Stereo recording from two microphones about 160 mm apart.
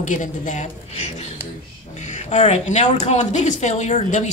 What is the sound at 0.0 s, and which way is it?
Speech, 50° left (ahead or behind).